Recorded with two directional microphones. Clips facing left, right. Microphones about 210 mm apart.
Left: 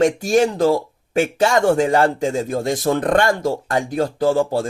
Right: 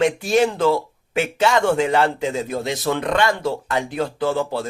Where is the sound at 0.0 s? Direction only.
45° left (ahead or behind).